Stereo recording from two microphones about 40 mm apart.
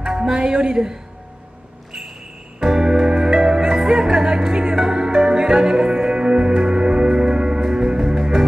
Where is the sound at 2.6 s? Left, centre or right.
Centre.